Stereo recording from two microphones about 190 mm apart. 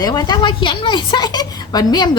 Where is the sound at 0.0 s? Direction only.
20° left (ahead or behind).